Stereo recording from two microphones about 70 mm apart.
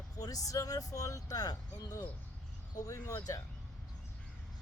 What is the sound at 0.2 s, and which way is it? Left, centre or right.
Speech, left.